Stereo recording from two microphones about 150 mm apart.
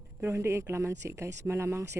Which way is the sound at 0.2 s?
15° right (ahead or behind).